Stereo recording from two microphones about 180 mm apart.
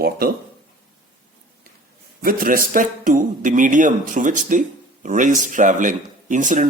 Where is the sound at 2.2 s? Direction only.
50° right (ahead or behind).